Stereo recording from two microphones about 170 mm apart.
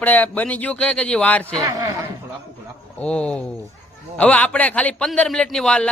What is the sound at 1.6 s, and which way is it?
Speech, 20° right (ahead or behind).